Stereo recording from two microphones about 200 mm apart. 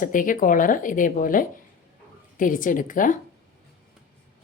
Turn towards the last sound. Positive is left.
turn(degrees=40)  # may be behind; listen again after turning